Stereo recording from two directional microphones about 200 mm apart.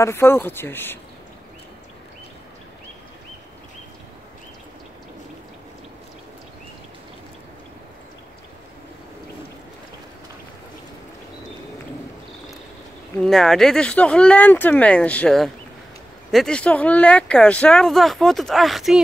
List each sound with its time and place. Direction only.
0.0 s speech: 10° left (ahead or behind)
13.2 s speech: centre (ahead or behind)